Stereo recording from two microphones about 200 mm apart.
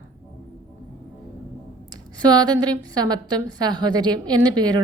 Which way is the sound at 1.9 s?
20° right (ahead or behind).